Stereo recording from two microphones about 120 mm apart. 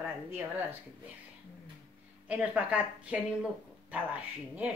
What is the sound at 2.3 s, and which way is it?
Speech, 10° right (ahead or behind).